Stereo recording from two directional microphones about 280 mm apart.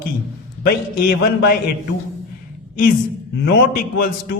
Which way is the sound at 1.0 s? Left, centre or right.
Left.